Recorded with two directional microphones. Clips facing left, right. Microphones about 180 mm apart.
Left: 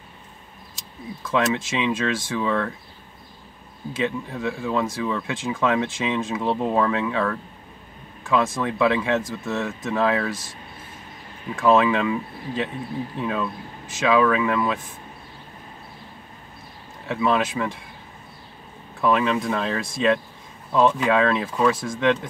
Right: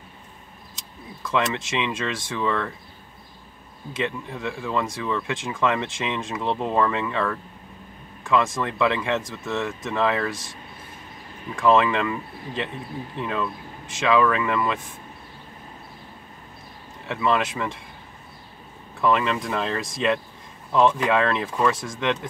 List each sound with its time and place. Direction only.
1.2 s speech: 5° left (ahead or behind)
3.9 s speech: 5° left (ahead or behind)
11.5 s speech: 5° left (ahead or behind)
17.1 s speech: 5° left (ahead or behind)
18.9 s speech: 5° left (ahead or behind)